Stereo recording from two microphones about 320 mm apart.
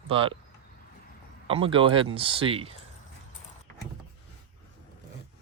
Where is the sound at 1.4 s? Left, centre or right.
Centre.